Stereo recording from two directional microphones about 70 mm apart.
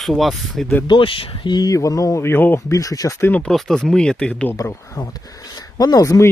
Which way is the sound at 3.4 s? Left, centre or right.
Centre.